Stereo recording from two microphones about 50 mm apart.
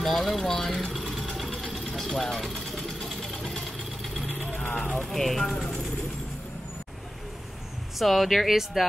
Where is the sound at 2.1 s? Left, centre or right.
Centre.